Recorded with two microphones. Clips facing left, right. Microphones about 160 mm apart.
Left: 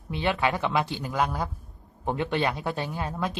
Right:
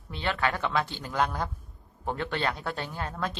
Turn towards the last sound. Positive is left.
turn(degrees=15)  # may be behind; listen again after turning